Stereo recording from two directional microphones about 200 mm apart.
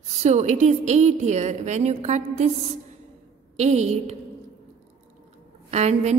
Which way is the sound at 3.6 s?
35° right (ahead or behind).